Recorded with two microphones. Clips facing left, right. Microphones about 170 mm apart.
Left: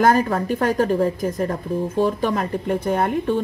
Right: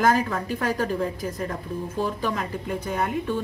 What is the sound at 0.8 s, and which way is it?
Speech, 40° left (ahead or behind).